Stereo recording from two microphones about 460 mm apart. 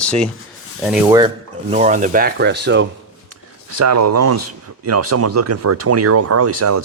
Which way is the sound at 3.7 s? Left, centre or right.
Right.